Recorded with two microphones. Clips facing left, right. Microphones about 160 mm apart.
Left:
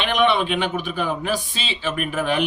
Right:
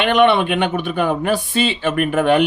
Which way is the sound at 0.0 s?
60° right (ahead or behind).